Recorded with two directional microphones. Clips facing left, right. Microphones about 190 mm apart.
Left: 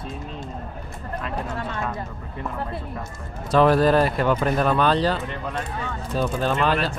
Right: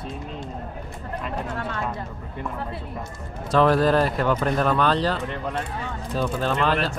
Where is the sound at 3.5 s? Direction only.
10° left (ahead or behind).